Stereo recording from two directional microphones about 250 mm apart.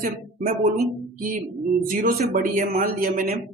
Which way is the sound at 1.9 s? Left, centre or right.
Right.